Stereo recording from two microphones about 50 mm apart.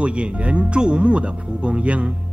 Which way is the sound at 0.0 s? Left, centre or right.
Right.